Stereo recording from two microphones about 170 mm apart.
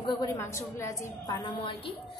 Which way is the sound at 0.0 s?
20° left (ahead or behind).